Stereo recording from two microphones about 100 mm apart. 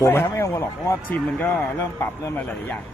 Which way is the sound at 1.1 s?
20° left (ahead or behind).